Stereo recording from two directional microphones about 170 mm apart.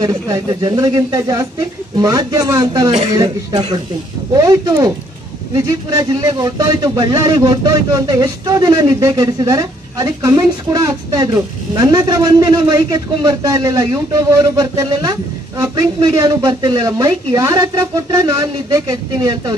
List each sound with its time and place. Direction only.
0.0 s a man's voice: 25° right (ahead or behind)